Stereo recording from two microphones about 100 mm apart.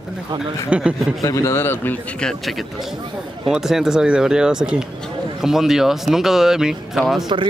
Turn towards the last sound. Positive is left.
turn(degrees=0)  # may be behind; listen again after turning